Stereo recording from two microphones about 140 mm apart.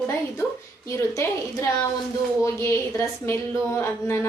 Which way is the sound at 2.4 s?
20° left (ahead or behind).